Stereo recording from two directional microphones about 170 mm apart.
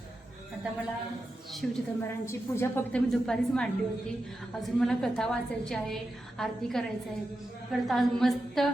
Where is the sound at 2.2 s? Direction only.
15° left (ahead or behind).